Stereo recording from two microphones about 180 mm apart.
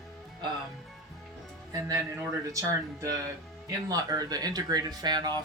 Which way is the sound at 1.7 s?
20° right (ahead or behind).